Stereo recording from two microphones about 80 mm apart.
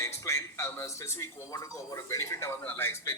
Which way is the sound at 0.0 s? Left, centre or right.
Left.